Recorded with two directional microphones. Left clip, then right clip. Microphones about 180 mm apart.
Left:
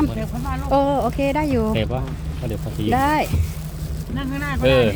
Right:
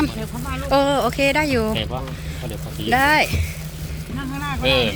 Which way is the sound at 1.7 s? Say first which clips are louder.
Left 1 dB; 60° left (ahead or behind).